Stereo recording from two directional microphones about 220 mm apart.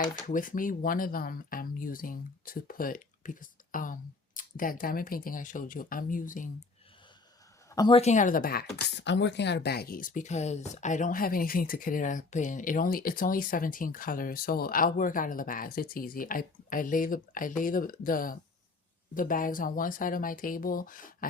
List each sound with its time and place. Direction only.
0.3 s speech: 40° left (ahead or behind)
7.7 s speech: 20° left (ahead or behind); by 21.2 s 40° left (ahead or behind)